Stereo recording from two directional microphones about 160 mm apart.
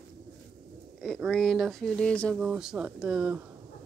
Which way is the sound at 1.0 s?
Centre (ahead or behind).